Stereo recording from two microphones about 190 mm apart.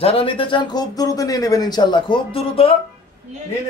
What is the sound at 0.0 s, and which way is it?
Speech, 30° left (ahead or behind).